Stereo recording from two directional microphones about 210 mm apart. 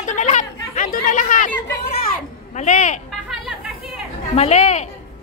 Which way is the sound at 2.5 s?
35° left (ahead or behind).